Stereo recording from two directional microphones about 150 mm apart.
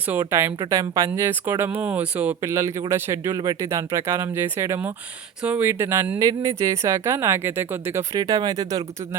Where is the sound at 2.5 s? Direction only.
20° right (ahead or behind).